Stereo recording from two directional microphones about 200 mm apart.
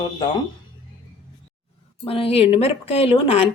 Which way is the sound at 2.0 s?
25° left (ahead or behind).